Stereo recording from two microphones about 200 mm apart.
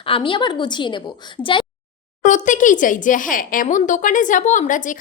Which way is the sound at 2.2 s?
40° left (ahead or behind).